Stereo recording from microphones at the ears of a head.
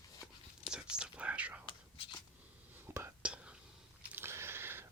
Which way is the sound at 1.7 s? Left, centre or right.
Left.